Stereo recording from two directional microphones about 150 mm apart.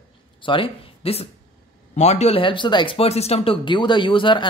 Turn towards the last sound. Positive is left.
turn(degrees=35)  # may be behind; listen again after turning